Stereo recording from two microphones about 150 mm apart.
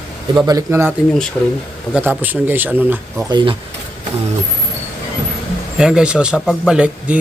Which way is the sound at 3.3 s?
30° right (ahead or behind).